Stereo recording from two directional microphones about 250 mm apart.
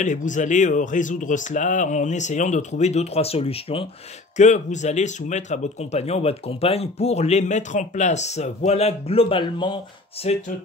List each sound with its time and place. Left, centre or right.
0.0 s speech: left